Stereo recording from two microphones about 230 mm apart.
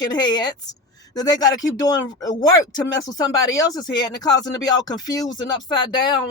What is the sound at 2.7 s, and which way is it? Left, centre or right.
Speech, centre.